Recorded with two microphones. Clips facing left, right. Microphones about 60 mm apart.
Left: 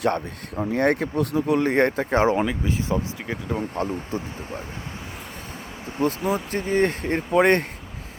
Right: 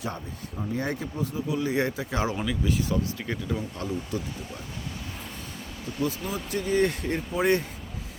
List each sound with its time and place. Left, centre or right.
0.0 s speech: left
0.7 s speech: left
3.5 s speech: left
6.0 s speech: left
7.3 s speech: left